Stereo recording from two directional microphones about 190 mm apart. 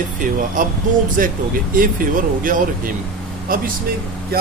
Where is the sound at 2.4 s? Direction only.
45° right (ahead or behind).